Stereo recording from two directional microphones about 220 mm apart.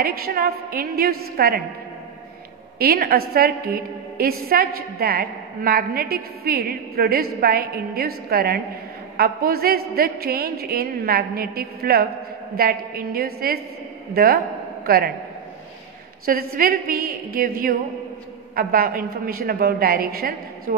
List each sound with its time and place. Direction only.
0.0 s a woman's voice: 45° right (ahead or behind)
2.8 s a woman's voice: 45° right (ahead or behind)
16.5 s a woman's voice: 40° right (ahead or behind)